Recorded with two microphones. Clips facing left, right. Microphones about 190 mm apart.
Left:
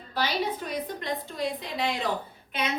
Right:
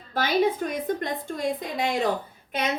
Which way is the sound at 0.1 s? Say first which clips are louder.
Right 6 dB; 50° right (ahead or behind).